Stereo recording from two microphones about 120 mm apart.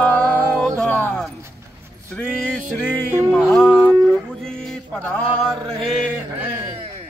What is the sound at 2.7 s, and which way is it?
Music, 15° left (ahead or behind).